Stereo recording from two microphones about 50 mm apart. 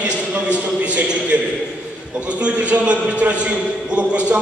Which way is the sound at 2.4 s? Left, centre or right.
Right.